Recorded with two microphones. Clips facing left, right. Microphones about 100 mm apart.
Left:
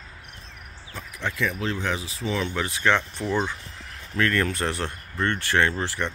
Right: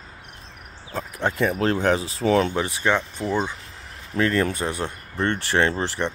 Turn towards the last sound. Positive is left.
turn(degrees=-25)  # may be behind; listen again after turning